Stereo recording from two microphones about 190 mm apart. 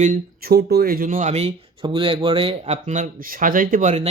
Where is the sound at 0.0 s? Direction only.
50° right (ahead or behind).